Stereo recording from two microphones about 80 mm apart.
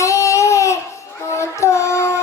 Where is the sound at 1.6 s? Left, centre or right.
Left.